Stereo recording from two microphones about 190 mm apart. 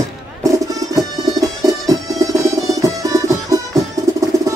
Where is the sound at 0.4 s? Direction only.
20° right (ahead or behind).